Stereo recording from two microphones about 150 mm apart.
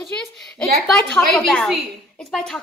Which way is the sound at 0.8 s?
5° left (ahead or behind).